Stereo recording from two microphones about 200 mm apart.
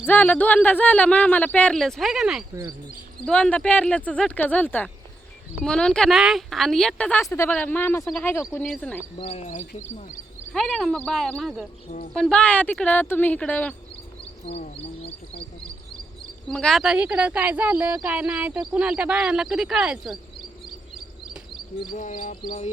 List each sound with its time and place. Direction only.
0.1 s a woman's voice: 10° left (ahead or behind)
9.1 s speech: 30° left (ahead or behind)
10.5 s a woman's voice: centre (ahead or behind)
11.9 s speech: 45° left (ahead or behind)
12.1 s speech: 5° left (ahead or behind)
14.4 s speech: 30° left (ahead or behind)
16.5 s a woman's voice: centre (ahead or behind)
21.9 s speech: 40° left (ahead or behind)